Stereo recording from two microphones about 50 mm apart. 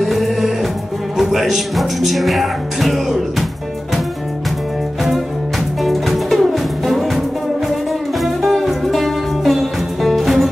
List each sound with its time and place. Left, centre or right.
0.0 s music: centre
1.1 s speech: centre
5.8 s music: centre